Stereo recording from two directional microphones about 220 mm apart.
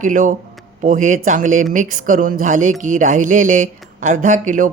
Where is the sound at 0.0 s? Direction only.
35° right (ahead or behind).